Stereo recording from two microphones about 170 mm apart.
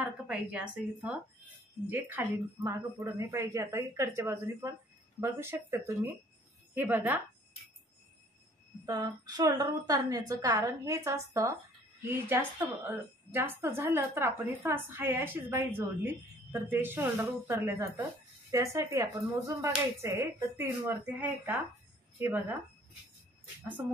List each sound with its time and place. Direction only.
0.0 s a woman's voice: 5° right (ahead or behind)
8.8 s a woman's voice: 25° right (ahead or behind)
23.8 s a woman's voice: 15° right (ahead or behind)